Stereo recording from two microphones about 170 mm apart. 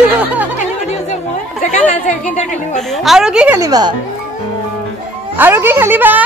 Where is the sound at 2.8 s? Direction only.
Centre (ahead or behind).